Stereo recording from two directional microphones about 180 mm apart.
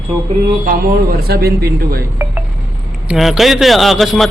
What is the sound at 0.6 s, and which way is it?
A man's voice, 55° right (ahead or behind).